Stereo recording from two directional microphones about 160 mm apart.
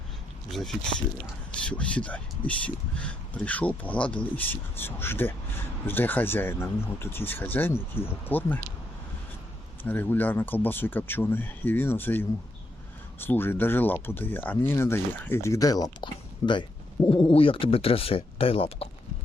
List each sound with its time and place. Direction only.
0.5 s speech: centre (ahead or behind)
9.8 s speech: 10° left (ahead or behind)
17.1 s speech: 35° left (ahead or behind)